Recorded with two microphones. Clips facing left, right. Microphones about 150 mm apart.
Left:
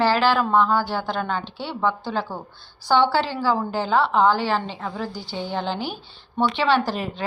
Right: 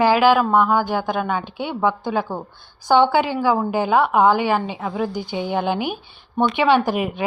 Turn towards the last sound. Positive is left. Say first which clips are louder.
# right 4 dB
turn(degrees=-15)  # may be behind; listen again after turning